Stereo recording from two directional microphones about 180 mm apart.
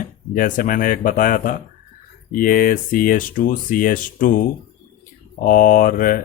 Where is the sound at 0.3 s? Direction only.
50° left (ahead or behind).